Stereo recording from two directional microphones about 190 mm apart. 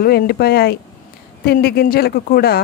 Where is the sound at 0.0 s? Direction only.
55° left (ahead or behind).